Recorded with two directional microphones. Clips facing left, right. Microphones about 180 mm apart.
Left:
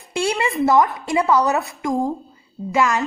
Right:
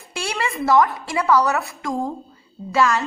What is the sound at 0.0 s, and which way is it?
A woman's voice, 20° left (ahead or behind).